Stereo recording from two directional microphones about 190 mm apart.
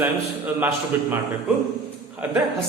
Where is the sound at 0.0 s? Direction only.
10° right (ahead or behind).